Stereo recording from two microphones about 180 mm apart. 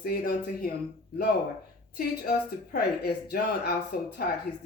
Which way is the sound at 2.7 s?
60° left (ahead or behind).